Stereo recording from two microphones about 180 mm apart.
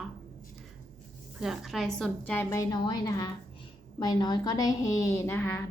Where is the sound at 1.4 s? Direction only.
Centre (ahead or behind).